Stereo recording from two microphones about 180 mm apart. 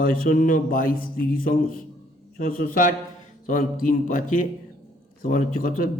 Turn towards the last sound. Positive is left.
turn(degrees=50)  # may be behind; listen again after turning